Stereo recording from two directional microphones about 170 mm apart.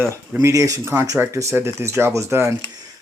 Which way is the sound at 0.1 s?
20° right (ahead or behind).